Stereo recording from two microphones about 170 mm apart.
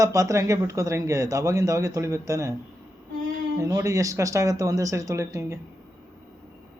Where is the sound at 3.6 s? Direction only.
20° right (ahead or behind).